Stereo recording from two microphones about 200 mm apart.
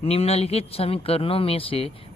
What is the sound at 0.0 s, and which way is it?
Speech, 30° left (ahead or behind).